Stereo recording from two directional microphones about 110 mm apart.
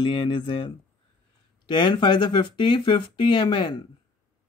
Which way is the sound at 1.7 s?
45° left (ahead or behind).